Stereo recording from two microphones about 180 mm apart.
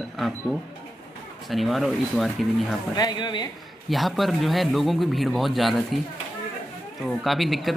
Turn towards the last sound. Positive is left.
turn(degrees=0)  # may be behind; listen again after turning